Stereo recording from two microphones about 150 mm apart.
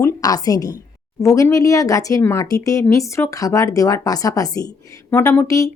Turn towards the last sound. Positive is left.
turn(degrees=20)  # may be behind; listen again after turning